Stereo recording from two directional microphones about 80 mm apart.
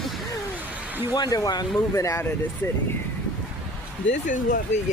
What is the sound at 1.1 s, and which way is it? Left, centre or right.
Speech, left.